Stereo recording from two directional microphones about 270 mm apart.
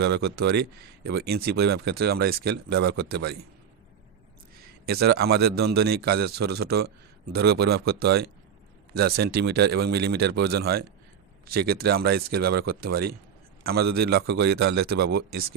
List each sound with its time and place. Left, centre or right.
0.0 s speech: right
4.9 s speech: right